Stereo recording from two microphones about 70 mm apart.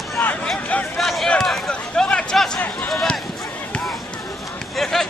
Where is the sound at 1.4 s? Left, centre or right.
Centre.